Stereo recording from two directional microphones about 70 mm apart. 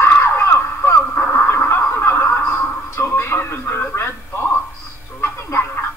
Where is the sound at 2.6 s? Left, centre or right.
Left.